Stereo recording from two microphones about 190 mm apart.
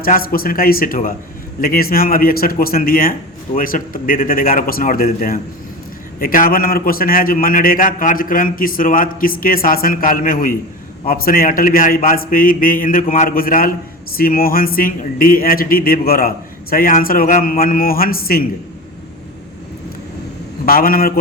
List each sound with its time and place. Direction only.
0.0 s a man's voice: 50° left (ahead or behind)
20.7 s a man's voice: 50° left (ahead or behind)